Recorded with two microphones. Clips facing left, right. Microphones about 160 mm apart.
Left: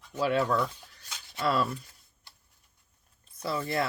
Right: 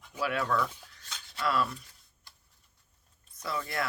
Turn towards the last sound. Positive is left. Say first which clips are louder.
# left 4 dB
turn(degrees=30)  # may be behind; listen again after turning